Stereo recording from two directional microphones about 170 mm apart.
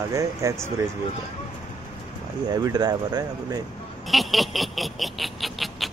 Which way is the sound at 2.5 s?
25° right (ahead or behind).